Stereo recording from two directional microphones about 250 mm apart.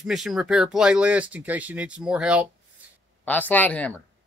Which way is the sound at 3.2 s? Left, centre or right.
Centre.